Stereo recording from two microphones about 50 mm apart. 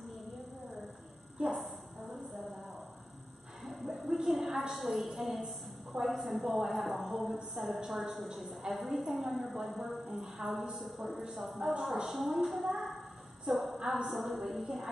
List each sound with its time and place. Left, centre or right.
1.4 s a woman's voice: right
3.6 s a sound: centre
6.7 s a woman's voice: centre